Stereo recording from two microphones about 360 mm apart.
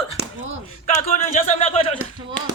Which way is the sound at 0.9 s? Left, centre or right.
Centre.